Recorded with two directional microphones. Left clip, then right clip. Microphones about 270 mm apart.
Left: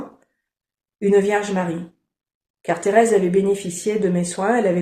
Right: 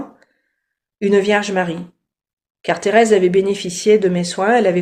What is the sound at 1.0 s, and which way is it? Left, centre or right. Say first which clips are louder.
Speech: right 2 dB; right.